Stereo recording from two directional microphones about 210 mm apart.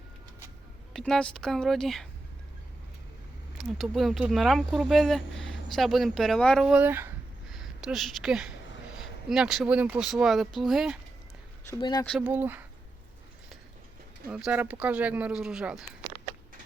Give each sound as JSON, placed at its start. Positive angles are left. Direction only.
{"t": 0.9, "sound": "speech", "side_deg": 0}
{"t": 3.6, "sound": "speech", "side_deg": 0}
{"t": 11.8, "sound": "speech", "side_deg": 20}
{"t": 12.0, "sound": "speech", "side_deg": 0}
{"t": 14.3, "sound": "speech", "side_deg": -5}